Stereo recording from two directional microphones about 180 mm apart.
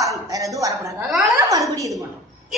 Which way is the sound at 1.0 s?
Centre (ahead or behind).